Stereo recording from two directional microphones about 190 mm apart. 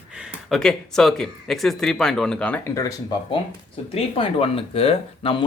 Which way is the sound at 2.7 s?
20° left (ahead or behind).